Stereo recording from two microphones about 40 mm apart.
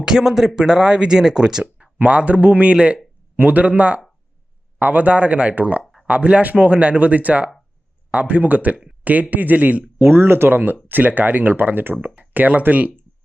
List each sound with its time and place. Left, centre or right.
0.0 s speech: centre
2.0 s speech: right
3.3 s speech: right
3.6 s speech: right
10.0 s speech: right
12.3 s speech: right